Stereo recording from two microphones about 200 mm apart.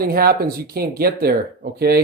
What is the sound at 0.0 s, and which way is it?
Speech, 50° right (ahead or behind).